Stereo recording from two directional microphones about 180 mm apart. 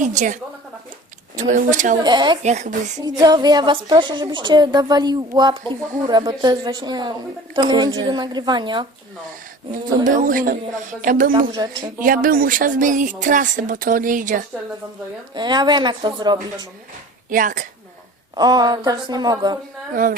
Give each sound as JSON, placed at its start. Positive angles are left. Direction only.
{"t": 0.0, "sound": "speech", "side_deg": -45}
{"t": 1.4, "sound": "speech", "side_deg": -45}
{"t": 2.0, "sound": "a woman's voice", "side_deg": -25}
{"t": 2.4, "sound": "a woman's voice", "side_deg": -40}
{"t": 3.0, "sound": "a woman's voice", "side_deg": -20}
{"t": 10.1, "sound": "speech", "side_deg": -50}
{"t": 11.3, "sound": "a woman's voice", "side_deg": -25}
{"t": 11.9, "sound": "speech", "side_deg": -50}
{"t": 15.4, "sound": "a woman's voice", "side_deg": -25}
{"t": 17.2, "sound": "a woman's voice", "side_deg": -45}
{"t": 18.3, "sound": "a woman's voice", "side_deg": -20}
{"t": 19.9, "sound": "speech", "side_deg": -50}